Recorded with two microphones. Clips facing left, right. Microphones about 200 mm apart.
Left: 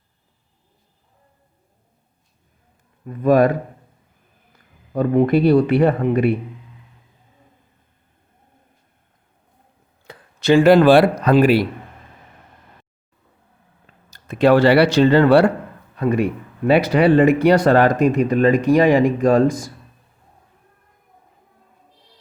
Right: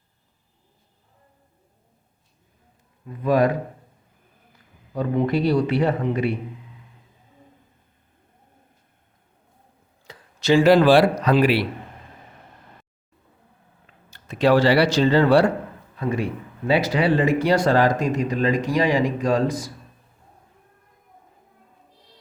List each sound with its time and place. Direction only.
3.2 s a man's voice: 50° left (ahead or behind)
4.9 s a man's voice: 55° left (ahead or behind)
10.1 s a man's voice: 55° left (ahead or behind)
13.8 s speech: 45° left (ahead or behind)